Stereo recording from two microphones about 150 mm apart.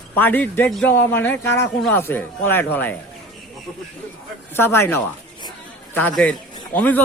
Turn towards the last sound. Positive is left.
turn(degrees=10)  # may be behind; listen again after turning